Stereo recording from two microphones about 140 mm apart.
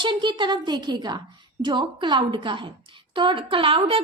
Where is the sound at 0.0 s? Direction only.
35° right (ahead or behind).